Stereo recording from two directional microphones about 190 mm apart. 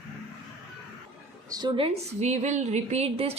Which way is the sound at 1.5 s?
20° right (ahead or behind).